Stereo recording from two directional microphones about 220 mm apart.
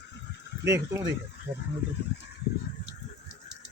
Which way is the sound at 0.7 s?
15° right (ahead or behind).